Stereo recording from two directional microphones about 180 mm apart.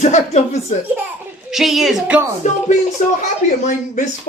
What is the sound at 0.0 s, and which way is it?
Speech, 40° left (ahead or behind).